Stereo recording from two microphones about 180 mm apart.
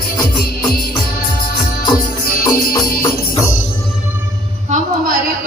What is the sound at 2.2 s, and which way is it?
Music, 60° left (ahead or behind).